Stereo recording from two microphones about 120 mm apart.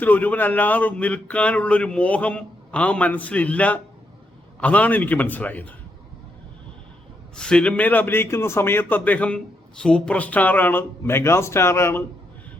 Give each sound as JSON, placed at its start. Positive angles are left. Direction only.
{"t": 0.0, "sound": "a man's voice", "side_deg": 15}
{"t": 7.3, "sound": "a man's voice", "side_deg": 5}